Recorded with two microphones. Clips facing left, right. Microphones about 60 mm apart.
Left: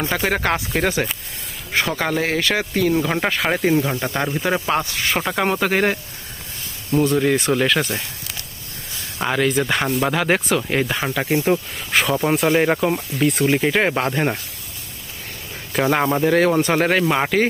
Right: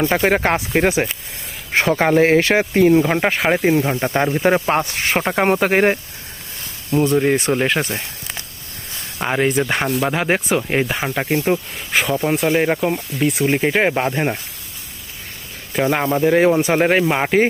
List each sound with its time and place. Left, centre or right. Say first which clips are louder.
0.1 s speech: right 4 dB; right
1.7 s speech: right 6 dB; right
3.0 s speech: right 3 dB; centre
9.8 s speech: right 1 dB; centre
13.5 s speech: right 1 dB; centre
16.2 s speech: right 5 dB; centre